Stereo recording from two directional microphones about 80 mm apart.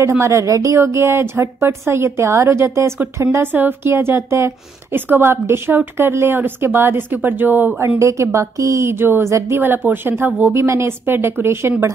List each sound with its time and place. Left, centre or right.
0.2 s a woman's voice: right
8.0 s a woman's voice: right